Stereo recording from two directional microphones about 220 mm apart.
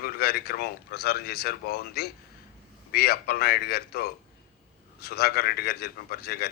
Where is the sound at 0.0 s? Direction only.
45° left (ahead or behind).